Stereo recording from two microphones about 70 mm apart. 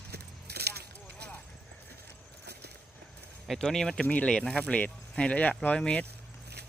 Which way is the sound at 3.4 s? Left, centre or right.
Centre.